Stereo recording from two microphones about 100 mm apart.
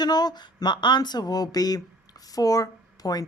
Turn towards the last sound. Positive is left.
turn(degrees=40)  # may be behind; listen again after turning